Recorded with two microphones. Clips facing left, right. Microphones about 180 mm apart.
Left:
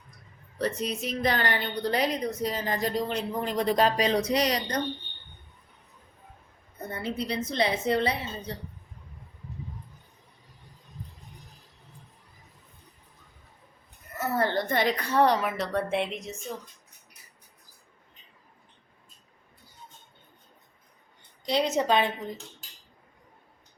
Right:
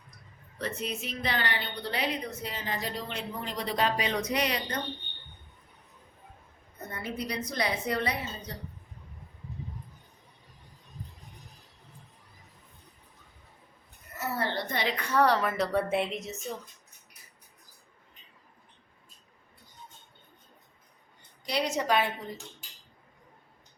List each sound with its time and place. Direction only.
0.6 s a woman's voice: 35° left (ahead or behind)
6.9 s a woman's voice: 30° left (ahead or behind)
14.2 s a sound: 50° left (ahead or behind)
15.1 s a woman's voice: 25° left (ahead or behind)
15.4 s a woman's voice: 5° left (ahead or behind)
21.4 s a woman's voice: 25° left (ahead or behind)